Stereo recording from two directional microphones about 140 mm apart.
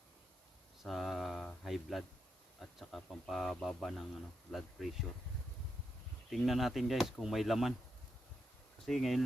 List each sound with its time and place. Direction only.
0.8 s a sound: centre (ahead or behind)
2.6 s speech: centre (ahead or behind)
6.3 s speech: centre (ahead or behind)
8.9 s speech: centre (ahead or behind)